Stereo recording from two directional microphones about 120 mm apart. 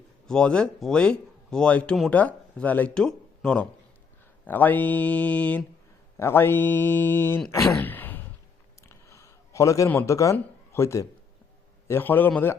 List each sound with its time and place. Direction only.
0.3 s speech: 5° left (ahead or behind)
7.8 s a sound: 15° left (ahead or behind)
9.9 s speech: 15° left (ahead or behind)